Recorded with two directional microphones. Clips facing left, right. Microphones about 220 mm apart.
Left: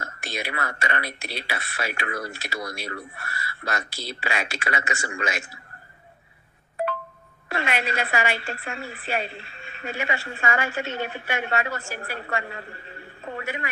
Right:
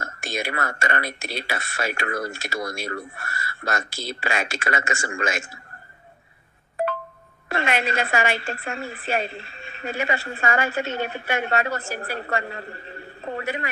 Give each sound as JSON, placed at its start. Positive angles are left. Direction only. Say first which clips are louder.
{"t": 0.0, "sound": "a woman's voice", "louder": "right 3 dB", "side_deg": -45}
{"t": 7.4, "sound": "a woman's voice", "louder": "right 3 dB", "side_deg": -45}